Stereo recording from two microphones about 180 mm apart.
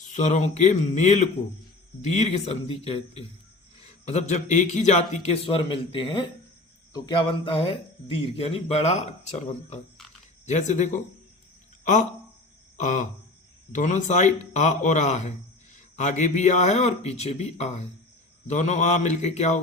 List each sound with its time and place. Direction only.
0.1 s a man's voice: 40° left (ahead or behind)
12.7 s a sound: 45° left (ahead or behind)
13.7 s a man's voice: 40° left (ahead or behind)